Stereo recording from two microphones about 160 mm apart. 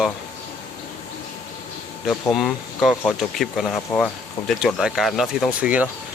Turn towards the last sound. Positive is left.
turn(degrees=-10)  # may be behind; listen again after turning